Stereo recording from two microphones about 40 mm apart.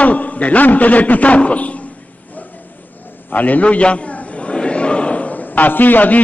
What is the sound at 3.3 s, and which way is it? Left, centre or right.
Speech, left.